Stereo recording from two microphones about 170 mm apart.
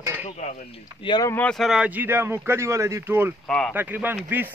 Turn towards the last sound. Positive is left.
turn(degrees=-10)  # may be behind; listen again after turning